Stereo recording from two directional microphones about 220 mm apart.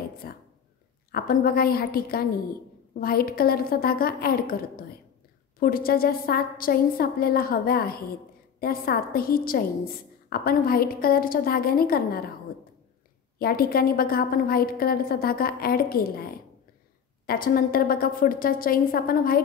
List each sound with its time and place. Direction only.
0.2 s a woman's voice: 45° left (ahead or behind)
13.4 s a woman's voice: 45° left (ahead or behind)